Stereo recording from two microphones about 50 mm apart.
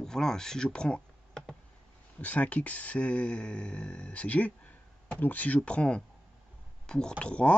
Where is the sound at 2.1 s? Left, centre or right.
Left.